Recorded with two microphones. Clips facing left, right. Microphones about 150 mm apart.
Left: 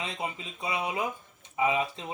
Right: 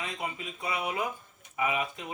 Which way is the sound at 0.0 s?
25° left (ahead or behind).